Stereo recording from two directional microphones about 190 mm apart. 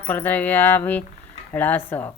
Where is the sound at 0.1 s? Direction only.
10° left (ahead or behind).